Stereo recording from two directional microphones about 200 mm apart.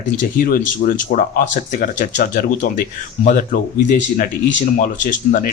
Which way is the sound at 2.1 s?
50° left (ahead or behind).